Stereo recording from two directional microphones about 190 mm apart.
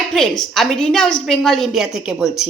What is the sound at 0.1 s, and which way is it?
A woman's voice, centre (ahead or behind).